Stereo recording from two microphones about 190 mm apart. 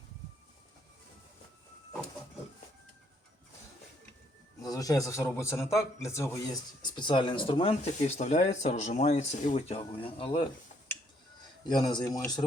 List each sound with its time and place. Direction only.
4.6 s a man's voice: 20° left (ahead or behind)
11.6 s speech: 25° left (ahead or behind)